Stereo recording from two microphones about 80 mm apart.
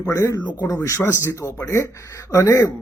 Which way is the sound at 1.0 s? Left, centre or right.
Left.